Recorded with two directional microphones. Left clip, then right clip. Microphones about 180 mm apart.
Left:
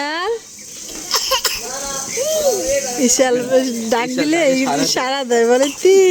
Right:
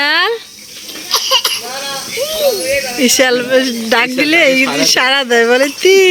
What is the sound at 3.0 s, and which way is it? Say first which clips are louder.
Speech: right 5 dB; 10° left (ahead or behind).